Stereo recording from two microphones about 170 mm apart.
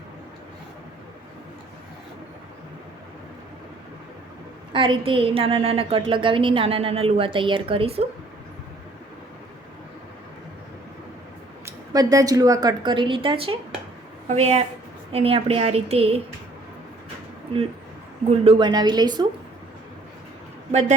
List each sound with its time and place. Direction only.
4.7 s a woman's voice: 30° right (ahead or behind)
11.6 s a woman's voice: 20° right (ahead or behind)
18.3 s a woman's voice: 30° right (ahead or behind)